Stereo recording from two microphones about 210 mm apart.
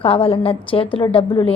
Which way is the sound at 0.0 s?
25° left (ahead or behind).